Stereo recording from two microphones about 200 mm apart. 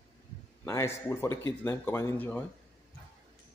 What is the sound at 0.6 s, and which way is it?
Speech, 15° left (ahead or behind).